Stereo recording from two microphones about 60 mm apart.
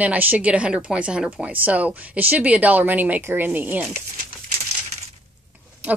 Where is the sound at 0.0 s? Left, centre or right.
Right.